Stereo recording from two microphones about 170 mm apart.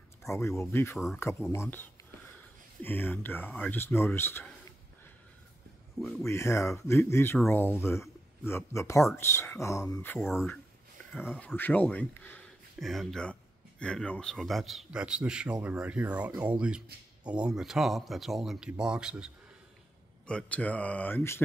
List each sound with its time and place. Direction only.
0.2 s speech: 15° left (ahead or behind)
0.9 s speech: centre (ahead or behind)
1.5 s speech: 15° left (ahead or behind)
6.2 s speech: 15° left (ahead or behind)
11.1 s speech: 10° left (ahead or behind)
20.2 s speech: 5° left (ahead or behind)